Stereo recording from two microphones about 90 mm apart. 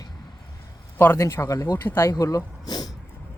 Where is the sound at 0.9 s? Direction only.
30° left (ahead or behind).